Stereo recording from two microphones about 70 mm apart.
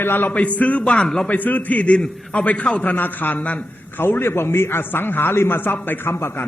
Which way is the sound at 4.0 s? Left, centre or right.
Left.